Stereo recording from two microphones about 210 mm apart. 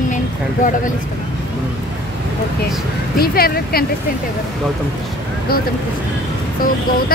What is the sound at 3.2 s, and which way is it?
Speech, 45° left (ahead or behind).